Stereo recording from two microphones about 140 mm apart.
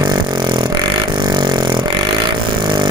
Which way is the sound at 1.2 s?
30° right (ahead or behind).